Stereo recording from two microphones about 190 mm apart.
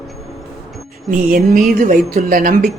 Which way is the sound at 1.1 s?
45° right (ahead or behind).